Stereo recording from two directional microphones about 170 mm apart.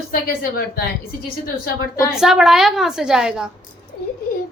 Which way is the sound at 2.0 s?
Centre (ahead or behind).